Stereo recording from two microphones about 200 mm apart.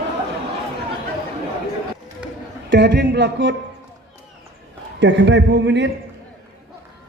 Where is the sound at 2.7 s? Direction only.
60° right (ahead or behind).